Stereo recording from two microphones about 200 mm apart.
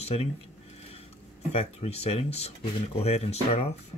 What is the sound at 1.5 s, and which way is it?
Speech, 30° left (ahead or behind).